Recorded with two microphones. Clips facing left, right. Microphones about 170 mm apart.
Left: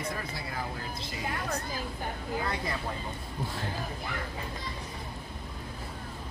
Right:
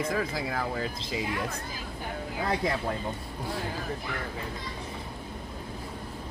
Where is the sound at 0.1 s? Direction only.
90° right.